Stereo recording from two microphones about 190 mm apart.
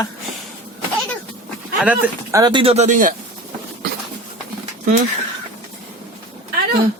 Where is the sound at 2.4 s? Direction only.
25° right (ahead or behind); by 3.1 s 40° right (ahead or behind).